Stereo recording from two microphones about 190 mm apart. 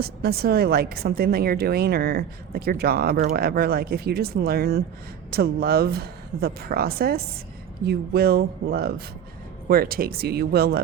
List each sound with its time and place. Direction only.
0.0 s a woman's voice: 55° right (ahead or behind)